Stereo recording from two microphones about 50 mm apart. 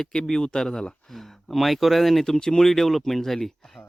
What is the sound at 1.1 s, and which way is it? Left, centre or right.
Speech, centre.